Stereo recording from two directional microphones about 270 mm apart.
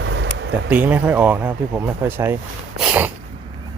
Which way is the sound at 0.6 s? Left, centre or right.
Centre.